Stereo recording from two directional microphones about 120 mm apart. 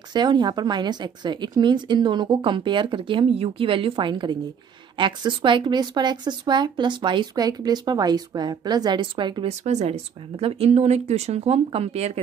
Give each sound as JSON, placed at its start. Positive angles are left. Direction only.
{"t": 0.1, "sound": "speech", "side_deg": -40}
{"t": 9.5, "sound": "speech", "side_deg": -65}